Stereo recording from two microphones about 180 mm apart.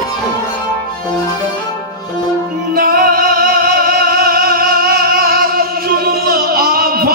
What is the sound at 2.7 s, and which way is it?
Music, 55° right (ahead or behind).